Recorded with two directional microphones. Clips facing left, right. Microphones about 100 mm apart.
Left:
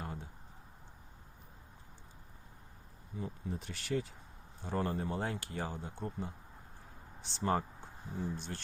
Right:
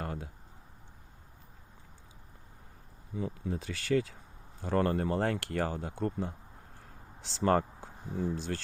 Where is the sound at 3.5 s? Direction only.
90° right.